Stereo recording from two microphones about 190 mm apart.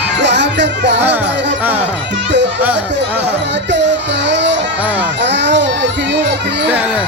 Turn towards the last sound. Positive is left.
turn(degrees=-5)  # may be behind; listen again after turning